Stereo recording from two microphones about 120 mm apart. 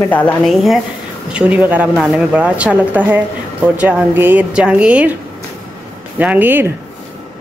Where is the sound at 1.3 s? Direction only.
10° right (ahead or behind).